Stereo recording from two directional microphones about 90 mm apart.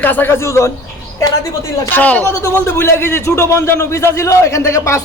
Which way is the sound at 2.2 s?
30° left (ahead or behind).